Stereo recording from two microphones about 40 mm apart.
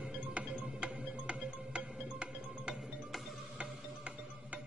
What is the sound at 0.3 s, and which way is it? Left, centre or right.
Music, right.